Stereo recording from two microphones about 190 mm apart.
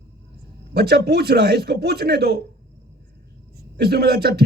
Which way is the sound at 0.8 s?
55° right (ahead or behind).